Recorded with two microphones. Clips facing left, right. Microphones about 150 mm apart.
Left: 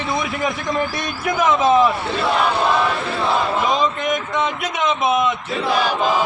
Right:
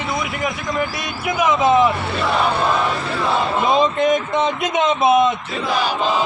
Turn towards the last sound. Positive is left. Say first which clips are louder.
# right 3 dB
turn(degrees=-30)  # may be behind; listen again after turning